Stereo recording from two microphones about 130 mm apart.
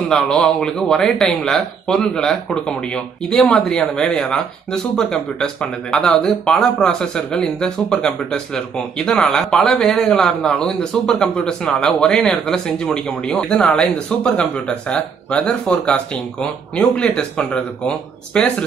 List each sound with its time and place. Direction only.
0.1 s speech: 5° left (ahead or behind)